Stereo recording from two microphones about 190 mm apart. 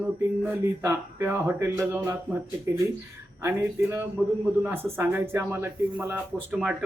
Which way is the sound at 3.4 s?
10° right (ahead or behind).